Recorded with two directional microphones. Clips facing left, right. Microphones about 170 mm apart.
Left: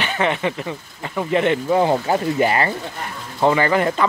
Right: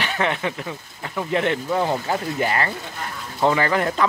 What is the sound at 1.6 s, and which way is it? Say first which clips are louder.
Speech: left 5 dB; 20° left (ahead or behind).